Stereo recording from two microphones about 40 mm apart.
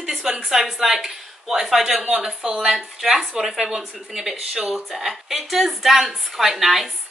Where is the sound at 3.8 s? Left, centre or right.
Centre.